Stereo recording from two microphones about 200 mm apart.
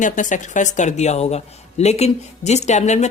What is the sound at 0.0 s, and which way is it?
Speech, 40° left (ahead or behind).